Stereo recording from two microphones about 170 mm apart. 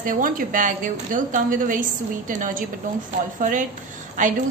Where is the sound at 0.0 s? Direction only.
55° right (ahead or behind).